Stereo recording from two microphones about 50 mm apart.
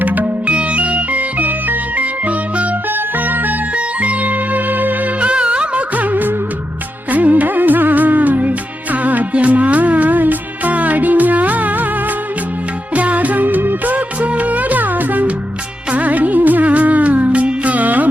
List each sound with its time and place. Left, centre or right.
0.0 s music: right
3.8 s music: right
5.2 s music: right
12.9 s music: right